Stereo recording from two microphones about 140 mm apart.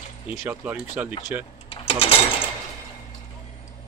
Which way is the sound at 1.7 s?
40° left (ahead or behind).